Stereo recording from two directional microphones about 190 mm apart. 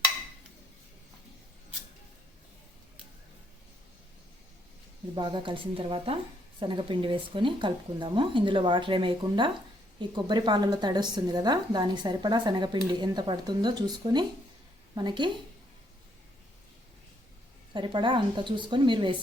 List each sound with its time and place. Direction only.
5.1 s speech: 25° right (ahead or behind)
17.7 s speech: 25° right (ahead or behind)